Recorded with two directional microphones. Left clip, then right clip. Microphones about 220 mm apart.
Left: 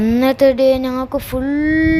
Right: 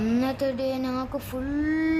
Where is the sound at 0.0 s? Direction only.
25° left (ahead or behind).